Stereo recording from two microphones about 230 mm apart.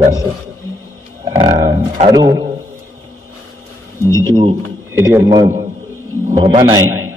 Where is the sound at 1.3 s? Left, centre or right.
Right.